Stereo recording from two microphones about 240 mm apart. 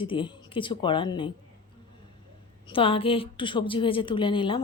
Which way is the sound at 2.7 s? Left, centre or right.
Left.